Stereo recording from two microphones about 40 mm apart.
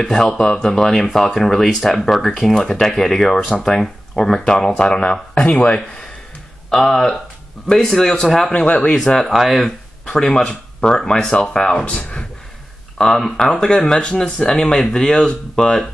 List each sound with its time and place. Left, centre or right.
0.0 s speech: centre
1.1 s speech: centre; by 5.8 s left
6.7 s speech: centre
8.6 s speech: left
8.9 s speech: centre
9.3 s speech: centre
10.0 s speech: centre
11.3 s speech: left
12.9 s speech: centre